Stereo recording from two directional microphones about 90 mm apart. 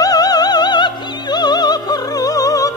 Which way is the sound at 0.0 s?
45° left (ahead or behind).